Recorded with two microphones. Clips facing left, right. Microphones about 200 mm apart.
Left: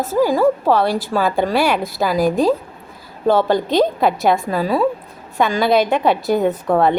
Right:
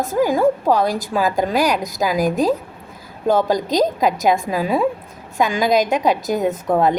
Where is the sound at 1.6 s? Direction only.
45° right (ahead or behind).